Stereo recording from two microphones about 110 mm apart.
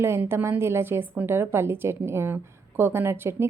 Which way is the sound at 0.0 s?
20° right (ahead or behind).